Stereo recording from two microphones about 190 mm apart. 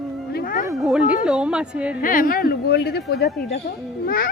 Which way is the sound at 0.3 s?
45° left (ahead or behind).